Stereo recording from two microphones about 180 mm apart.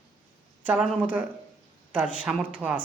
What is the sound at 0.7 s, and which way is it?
Speech, 10° right (ahead or behind).